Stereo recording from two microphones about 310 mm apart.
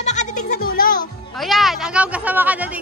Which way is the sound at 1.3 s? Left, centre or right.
Centre.